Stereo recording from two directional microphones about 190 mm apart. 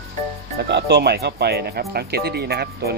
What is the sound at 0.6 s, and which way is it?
Speech, 65° right (ahead or behind).